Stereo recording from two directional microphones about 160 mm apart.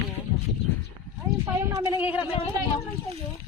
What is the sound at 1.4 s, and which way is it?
Speech, 20° right (ahead or behind).